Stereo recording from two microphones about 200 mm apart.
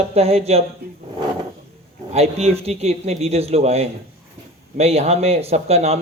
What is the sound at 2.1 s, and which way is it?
A man's voice, 30° right (ahead or behind).